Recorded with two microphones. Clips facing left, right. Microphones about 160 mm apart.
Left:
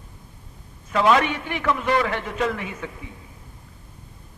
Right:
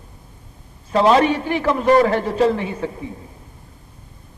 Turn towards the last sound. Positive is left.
turn(degrees=-35)  # may be behind; listen again after turning